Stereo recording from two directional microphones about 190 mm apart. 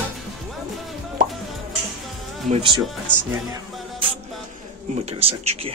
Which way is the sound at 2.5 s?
25° right (ahead or behind).